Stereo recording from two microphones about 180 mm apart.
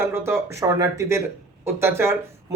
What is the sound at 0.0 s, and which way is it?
Speech, 15° right (ahead or behind).